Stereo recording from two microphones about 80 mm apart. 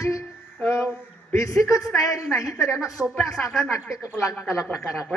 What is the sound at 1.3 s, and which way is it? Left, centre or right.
A woman's voice, left.